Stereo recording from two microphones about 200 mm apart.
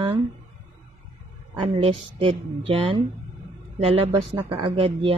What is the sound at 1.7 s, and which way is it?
Speech, 30° right (ahead or behind).